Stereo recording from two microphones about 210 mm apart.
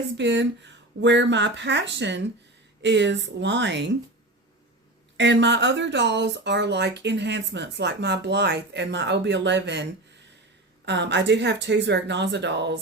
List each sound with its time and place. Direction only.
0.2 s speech: 55° right (ahead or behind)
5.1 s speech: 60° right (ahead or behind)
10.8 s speech: 55° right (ahead or behind)